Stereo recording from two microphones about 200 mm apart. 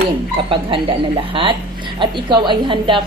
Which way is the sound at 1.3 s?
25° right (ahead or behind).